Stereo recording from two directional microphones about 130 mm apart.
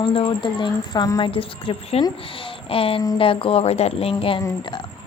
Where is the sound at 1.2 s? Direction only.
45° left (ahead or behind).